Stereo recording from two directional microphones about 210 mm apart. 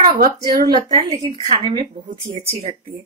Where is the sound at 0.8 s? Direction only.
30° right (ahead or behind).